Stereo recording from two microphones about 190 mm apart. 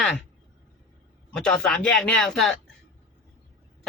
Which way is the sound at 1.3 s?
5° left (ahead or behind).